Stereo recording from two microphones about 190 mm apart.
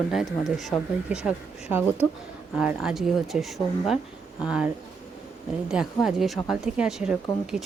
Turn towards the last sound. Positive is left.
turn(degrees=-5)  # may be behind; listen again after turning